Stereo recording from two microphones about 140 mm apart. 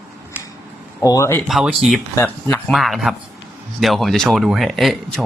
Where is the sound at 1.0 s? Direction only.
20° left (ahead or behind).